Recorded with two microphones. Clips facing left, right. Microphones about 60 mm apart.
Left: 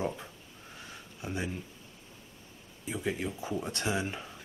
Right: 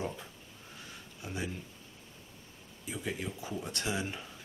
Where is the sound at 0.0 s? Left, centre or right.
Centre.